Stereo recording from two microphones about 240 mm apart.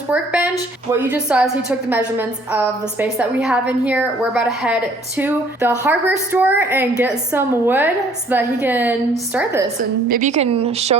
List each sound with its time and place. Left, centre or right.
0.1 s a woman's voice: centre
10.1 s speech: right